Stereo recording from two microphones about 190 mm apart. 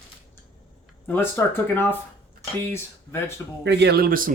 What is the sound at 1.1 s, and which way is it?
Speech, 10° left (ahead or behind).